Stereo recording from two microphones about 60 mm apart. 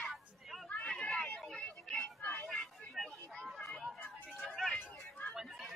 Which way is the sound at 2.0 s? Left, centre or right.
Left.